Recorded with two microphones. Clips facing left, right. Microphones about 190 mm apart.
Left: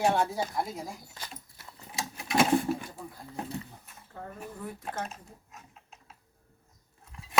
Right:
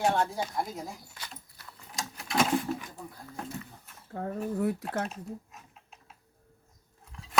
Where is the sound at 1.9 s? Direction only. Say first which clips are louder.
Left 3 dB; 10° left (ahead or behind).